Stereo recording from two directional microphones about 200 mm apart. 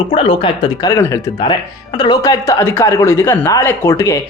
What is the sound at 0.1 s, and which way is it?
Speech, 25° left (ahead or behind).